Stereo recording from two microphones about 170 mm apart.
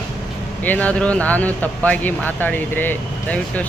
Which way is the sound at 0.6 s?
10° left (ahead or behind).